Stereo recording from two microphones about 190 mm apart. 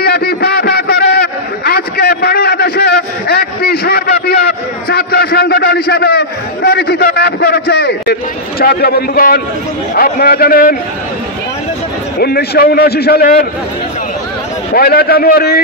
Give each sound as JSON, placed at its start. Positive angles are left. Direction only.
{"t": 0.0, "sound": "a sound", "side_deg": 55}
{"t": 9.9, "sound": "a man's voice", "side_deg": 50}
{"t": 12.2, "sound": "a man's voice", "side_deg": 55}
{"t": 14.7, "sound": "a man's voice", "side_deg": 50}